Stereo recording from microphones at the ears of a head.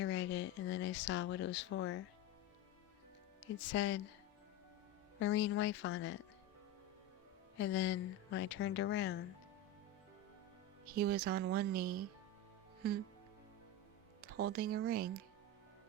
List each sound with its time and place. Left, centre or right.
0.0 s speech: left
3.4 s a woman's voice: left
5.1 s a woman's voice: left
7.5 s a woman's voice: left
10.8 s speech: right
14.2 s speech: right